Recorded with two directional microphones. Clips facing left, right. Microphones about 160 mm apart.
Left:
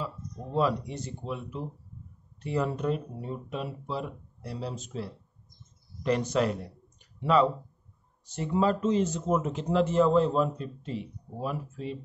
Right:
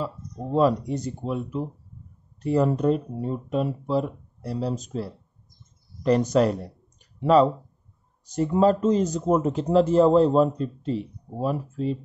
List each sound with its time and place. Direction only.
0.0 s speech: 40° right (ahead or behind)